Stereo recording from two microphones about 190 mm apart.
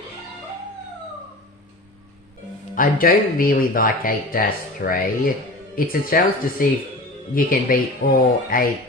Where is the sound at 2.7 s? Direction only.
45° left (ahead or behind).